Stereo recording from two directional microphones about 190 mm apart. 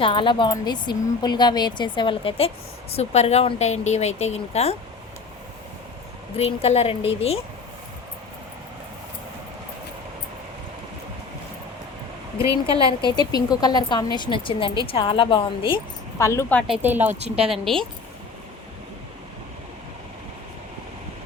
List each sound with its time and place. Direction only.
0.0 s a woman's voice: 25° left (ahead or behind)
6.3 s a woman's voice: 30° left (ahead or behind)
12.4 s speech: 15° right (ahead or behind)
13.0 s a woman's voice: 25° left (ahead or behind)
16.1 s speech: 15° left (ahead or behind)
16.6 s speech: 5° right (ahead or behind)
17.1 s a woman's voice: 35° right (ahead or behind)
17.5 s a woman's voice: centre (ahead or behind)